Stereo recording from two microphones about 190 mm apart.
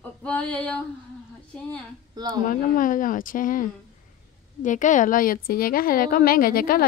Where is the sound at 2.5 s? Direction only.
45° left (ahead or behind).